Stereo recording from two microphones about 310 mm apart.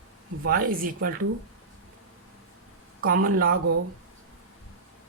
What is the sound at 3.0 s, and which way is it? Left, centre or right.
Speech, right.